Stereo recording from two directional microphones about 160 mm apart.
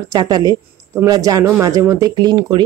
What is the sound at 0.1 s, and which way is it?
Speech, 25° right (ahead or behind).